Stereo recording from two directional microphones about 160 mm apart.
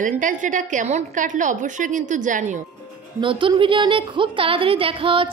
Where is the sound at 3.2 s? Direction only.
30° right (ahead or behind).